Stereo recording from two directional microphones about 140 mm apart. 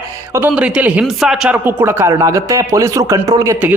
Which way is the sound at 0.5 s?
10° right (ahead or behind).